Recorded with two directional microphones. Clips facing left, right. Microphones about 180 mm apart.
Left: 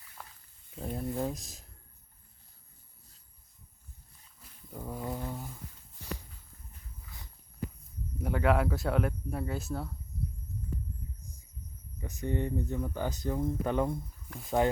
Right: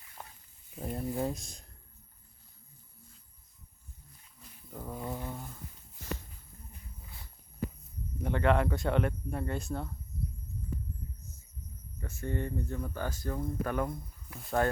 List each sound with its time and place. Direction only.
0.7 s speech: 5° right (ahead or behind)
4.7 s speech: 10° left (ahead or behind)
8.2 s speech: 5° left (ahead or behind)
11.9 s speech: 15° left (ahead or behind)
14.3 s speech: centre (ahead or behind)